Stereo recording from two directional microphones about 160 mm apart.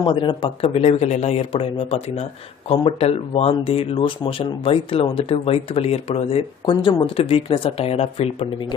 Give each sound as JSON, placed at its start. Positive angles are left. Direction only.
{"t": 0.0, "sound": "speech", "side_deg": 30}